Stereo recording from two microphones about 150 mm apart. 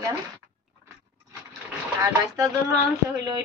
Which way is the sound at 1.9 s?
20° right (ahead or behind).